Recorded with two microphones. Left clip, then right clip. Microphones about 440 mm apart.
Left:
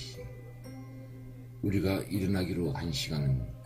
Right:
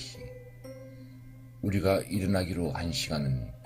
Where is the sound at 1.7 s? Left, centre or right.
Centre.